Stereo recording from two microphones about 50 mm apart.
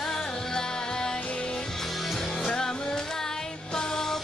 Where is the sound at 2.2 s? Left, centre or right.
Centre.